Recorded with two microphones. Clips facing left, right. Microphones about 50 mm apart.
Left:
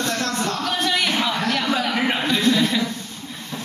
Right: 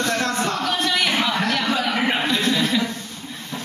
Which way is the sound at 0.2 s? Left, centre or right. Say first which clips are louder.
Right 2 dB; right.